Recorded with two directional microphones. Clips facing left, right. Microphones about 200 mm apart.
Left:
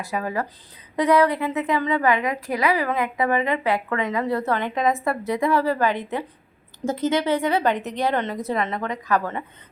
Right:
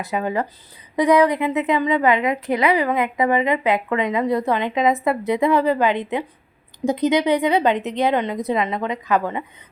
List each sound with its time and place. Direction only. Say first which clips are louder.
0.0 s a woman's voice: right 4 dB; 20° right (ahead or behind)